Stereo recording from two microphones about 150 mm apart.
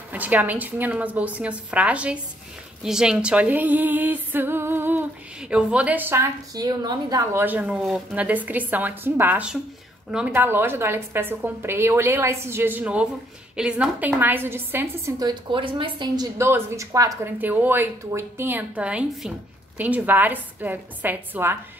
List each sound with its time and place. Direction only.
0.1 s speech: 10° right (ahead or behind)
6.5 s a woman's voice: 25° right (ahead or behind)
7.4 s speech: 10° right (ahead or behind); by 16.3 s 30° right (ahead or behind)
16.3 s a woman's voice: 15° right (ahead or behind)
17.4 s speech: 10° right (ahead or behind)